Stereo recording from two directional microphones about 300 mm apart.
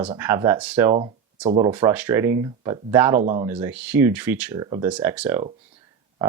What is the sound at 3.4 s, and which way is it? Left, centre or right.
Speech, centre.